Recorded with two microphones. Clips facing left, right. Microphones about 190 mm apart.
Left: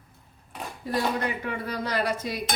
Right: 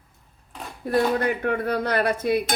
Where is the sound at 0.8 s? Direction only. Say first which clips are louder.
Right 6 dB; 55° right (ahead or behind).